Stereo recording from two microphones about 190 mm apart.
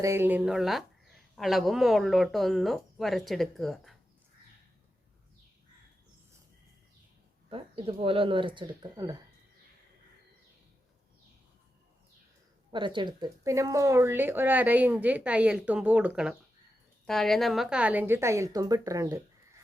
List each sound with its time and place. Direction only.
0.0 s speech: 10° right (ahead or behind)
7.5 s speech: 30° right (ahead or behind)
12.7 s speech: 25° right (ahead or behind)